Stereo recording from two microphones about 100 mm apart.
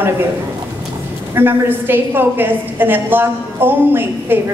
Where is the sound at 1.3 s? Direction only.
20° right (ahead or behind).